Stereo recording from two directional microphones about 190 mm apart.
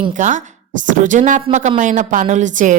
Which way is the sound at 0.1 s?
40° right (ahead or behind).